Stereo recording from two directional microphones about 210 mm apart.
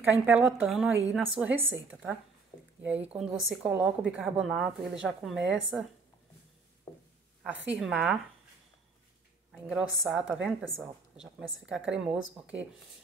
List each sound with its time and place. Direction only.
0.0 s a woman's voice: 10° right (ahead or behind)
5.4 s speech: 60° right (ahead or behind)
6.9 s a sound: 10° left (ahead or behind)
7.7 s a woman's voice: 5° right (ahead or behind)
9.5 s a woman's voice: 5° right (ahead or behind)